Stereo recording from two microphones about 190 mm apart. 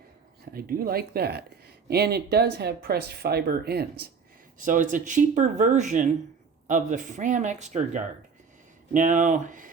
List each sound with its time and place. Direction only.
0.5 s speech: 50° right (ahead or behind)
4.5 s speech: 45° right (ahead or behind)